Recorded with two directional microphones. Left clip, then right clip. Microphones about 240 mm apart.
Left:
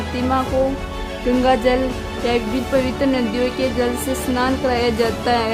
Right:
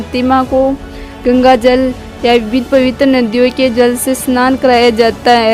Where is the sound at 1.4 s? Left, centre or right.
Right.